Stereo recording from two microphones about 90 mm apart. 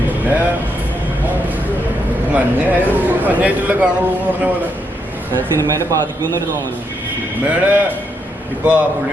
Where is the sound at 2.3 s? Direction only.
20° right (ahead or behind).